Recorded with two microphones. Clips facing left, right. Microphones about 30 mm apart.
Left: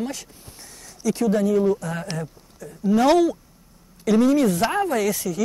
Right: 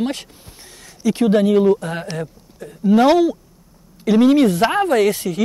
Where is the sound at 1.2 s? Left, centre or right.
Right.